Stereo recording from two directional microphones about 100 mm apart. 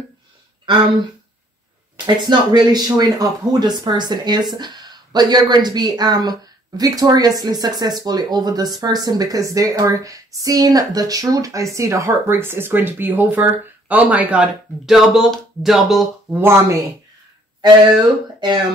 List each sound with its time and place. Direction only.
2.2 s a woman's voice: 45° right (ahead or behind); by 16.1 s centre (ahead or behind)
16.3 s speech: 25° right (ahead or behind)
17.6 s speech: 45° right (ahead or behind)